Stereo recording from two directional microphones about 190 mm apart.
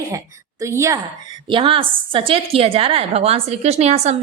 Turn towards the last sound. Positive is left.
turn(degrees=-35)  # may be behind; listen again after turning